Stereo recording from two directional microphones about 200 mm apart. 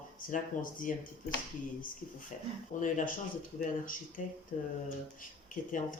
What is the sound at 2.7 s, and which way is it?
Speech, 40° left (ahead or behind).